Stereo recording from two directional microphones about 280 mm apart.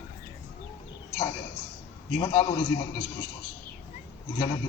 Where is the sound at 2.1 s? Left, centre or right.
Left.